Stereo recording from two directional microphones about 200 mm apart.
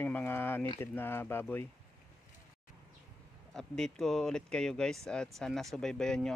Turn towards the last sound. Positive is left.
turn(degrees=5)  # may be behind; listen again after turning